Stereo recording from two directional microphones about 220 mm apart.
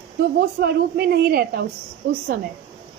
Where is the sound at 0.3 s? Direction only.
45° right (ahead or behind).